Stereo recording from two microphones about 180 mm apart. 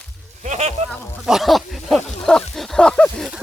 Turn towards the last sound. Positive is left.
turn(degrees=5)  # may be behind; listen again after turning